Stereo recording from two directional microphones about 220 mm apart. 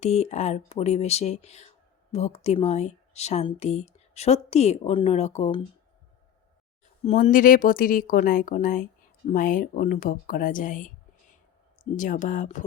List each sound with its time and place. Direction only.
0.0 s speech: 30° left (ahead or behind)
7.0 s speech: 35° left (ahead or behind)